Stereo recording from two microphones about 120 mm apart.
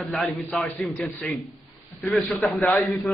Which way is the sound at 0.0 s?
Centre (ahead or behind).